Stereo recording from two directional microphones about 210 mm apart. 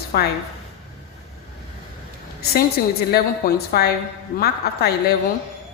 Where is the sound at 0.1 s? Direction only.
45° left (ahead or behind).